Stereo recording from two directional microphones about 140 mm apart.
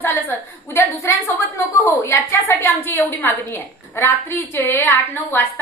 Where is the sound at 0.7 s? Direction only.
20° left (ahead or behind).